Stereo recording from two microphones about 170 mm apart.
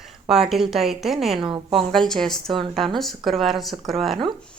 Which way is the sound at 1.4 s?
30° right (ahead or behind).